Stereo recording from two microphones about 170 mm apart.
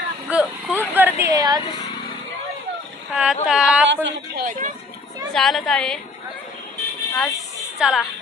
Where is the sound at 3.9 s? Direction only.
90° right.